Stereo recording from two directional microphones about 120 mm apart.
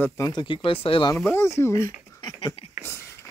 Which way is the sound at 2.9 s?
20° left (ahead or behind).